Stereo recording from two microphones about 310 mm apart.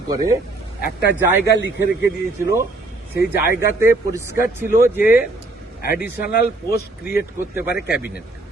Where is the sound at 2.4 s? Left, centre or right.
Centre.